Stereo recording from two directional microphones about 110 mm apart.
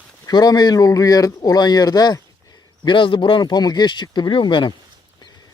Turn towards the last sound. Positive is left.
turn(degrees=45)  # may be behind; listen again after turning